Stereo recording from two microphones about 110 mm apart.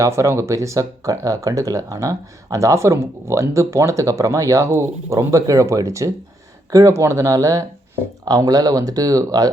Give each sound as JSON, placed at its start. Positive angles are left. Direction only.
{"t": 0.0, "sound": "speech", "side_deg": -25}